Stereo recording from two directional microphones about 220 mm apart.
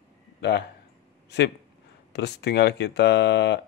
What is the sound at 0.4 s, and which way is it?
Speech, 50° left (ahead or behind).